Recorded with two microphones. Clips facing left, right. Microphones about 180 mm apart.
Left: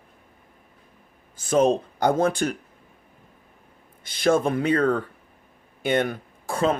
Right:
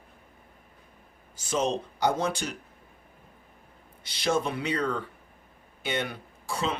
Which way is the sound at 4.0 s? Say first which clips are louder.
Left 7 dB; 50° left (ahead or behind).